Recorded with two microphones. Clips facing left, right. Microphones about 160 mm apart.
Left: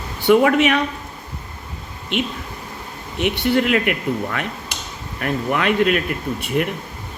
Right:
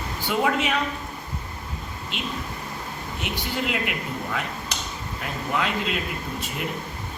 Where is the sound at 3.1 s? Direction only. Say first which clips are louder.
Left 12 dB; 70° left (ahead or behind).